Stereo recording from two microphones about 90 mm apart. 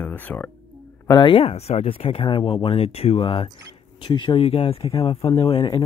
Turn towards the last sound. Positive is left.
turn(degrees=70)  # may be behind; listen again after turning